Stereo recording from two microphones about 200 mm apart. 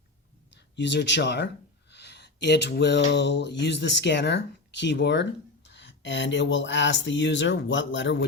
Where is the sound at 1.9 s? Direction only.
60° left (ahead or behind).